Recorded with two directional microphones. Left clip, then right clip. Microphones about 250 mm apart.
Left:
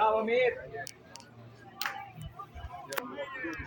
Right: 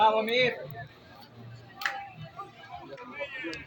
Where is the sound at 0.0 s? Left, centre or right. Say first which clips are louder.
Right 3 dB; right.